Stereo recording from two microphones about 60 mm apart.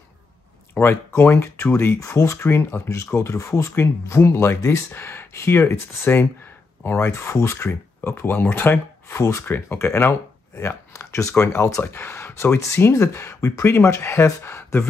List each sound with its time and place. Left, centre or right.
0.7 s speech: left
2.0 s speech: left
9.2 s speech: left
9.5 s speech: left
11.8 s speech: left
12.9 s speech: left